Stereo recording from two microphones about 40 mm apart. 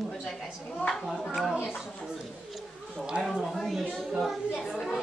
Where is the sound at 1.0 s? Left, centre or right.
Centre.